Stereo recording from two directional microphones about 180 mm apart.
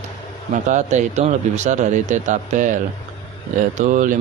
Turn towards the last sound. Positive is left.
turn(degrees=-45)  # may be behind; listen again after turning